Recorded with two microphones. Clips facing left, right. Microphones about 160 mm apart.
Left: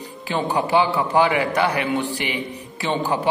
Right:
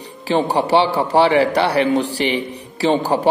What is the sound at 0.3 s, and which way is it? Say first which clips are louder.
A man's voice: right 5 dB; 35° right (ahead or behind).